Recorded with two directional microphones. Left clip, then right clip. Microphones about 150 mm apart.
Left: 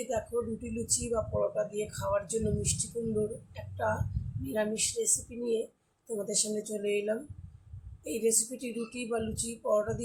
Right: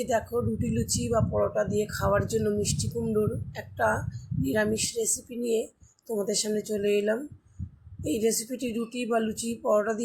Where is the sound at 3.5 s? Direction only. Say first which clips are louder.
Right 7 dB; 55° right (ahead or behind).